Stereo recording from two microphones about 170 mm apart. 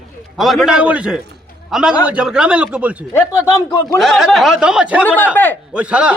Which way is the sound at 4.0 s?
Centre (ahead or behind).